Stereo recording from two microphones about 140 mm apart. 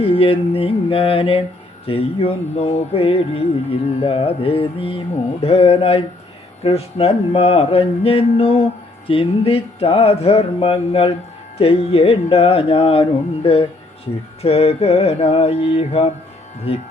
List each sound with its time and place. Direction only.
0.0 s mantra: 40° left (ahead or behind)
1.9 s speech: 45° left (ahead or behind)
4.0 s mantra: 45° left (ahead or behind)
5.4 s speech: 45° left (ahead or behind)